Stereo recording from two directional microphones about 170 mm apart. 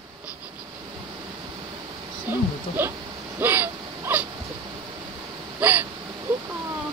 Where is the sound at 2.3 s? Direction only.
10° right (ahead or behind).